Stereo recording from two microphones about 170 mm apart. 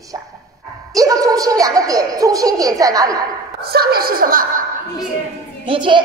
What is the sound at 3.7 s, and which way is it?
Speech, 65° right (ahead or behind).